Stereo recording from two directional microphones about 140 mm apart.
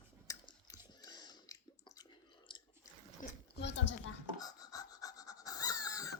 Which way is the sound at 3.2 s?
65° left (ahead or behind).